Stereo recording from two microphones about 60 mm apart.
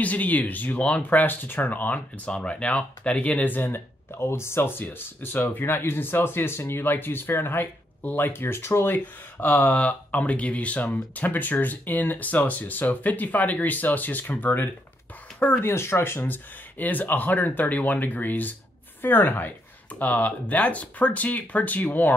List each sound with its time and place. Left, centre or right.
0.0 s speech: left
1.2 s speech: left
2.3 s speech: centre; by 3.8 s left
4.1 s speech: left
15.3 s a sound: left
15.6 s speech: left